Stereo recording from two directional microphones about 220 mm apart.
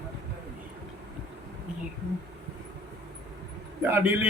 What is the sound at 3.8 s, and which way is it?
Speech, 10° right (ahead or behind).